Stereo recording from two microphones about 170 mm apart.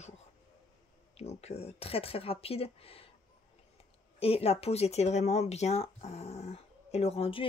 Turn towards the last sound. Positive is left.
turn(degrees=35)  # may be behind; listen again after turning